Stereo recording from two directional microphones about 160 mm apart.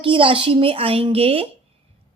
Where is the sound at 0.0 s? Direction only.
35° right (ahead or behind).